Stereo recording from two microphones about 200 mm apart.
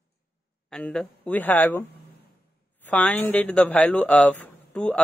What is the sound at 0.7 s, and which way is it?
Speech, 5° left (ahead or behind).